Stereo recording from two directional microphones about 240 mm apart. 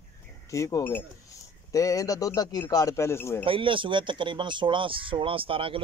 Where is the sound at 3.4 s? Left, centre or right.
Right.